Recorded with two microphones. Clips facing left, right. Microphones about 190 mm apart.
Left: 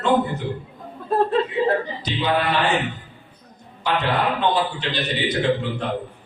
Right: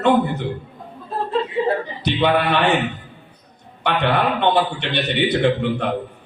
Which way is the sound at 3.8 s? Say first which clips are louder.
Right 3 dB; 65° right (ahead or behind).